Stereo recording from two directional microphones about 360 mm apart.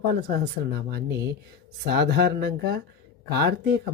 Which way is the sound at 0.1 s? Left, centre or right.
Right.